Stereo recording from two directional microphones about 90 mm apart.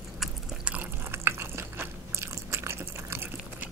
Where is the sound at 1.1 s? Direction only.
30° right (ahead or behind).